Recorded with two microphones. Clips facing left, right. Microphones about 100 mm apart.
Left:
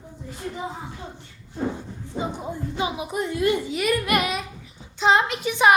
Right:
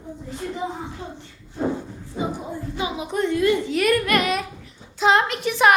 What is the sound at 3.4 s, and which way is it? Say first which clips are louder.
Speech: right 1 dB; 25° left (ahead or behind).